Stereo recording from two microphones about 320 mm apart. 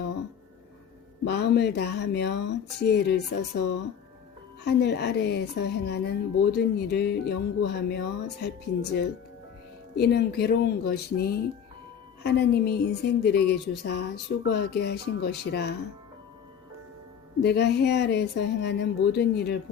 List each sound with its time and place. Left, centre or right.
1.3 s a woman's voice: left
17.4 s a woman's voice: left